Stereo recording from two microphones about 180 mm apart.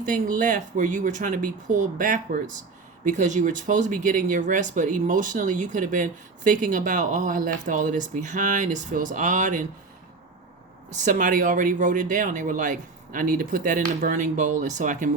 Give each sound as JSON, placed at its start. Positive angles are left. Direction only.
{"t": 0.0, "sound": "speech", "side_deg": -45}
{"t": 10.8, "sound": "speech", "side_deg": -45}